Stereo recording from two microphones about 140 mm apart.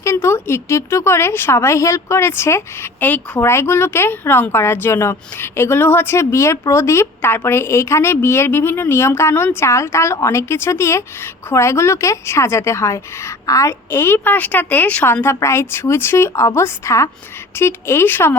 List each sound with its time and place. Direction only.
0.0 s a woman's voice: 20° left (ahead or behind)